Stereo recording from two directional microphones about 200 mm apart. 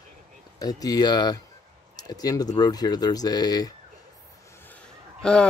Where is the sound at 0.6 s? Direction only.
20° left (ahead or behind).